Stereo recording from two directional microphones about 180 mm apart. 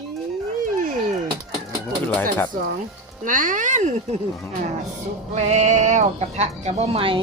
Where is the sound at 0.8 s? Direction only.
50° right (ahead or behind).